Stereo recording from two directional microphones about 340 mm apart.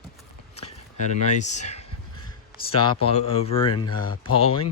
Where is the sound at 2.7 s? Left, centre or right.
Centre.